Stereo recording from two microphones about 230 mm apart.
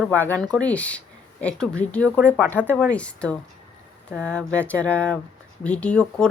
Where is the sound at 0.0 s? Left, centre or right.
Centre.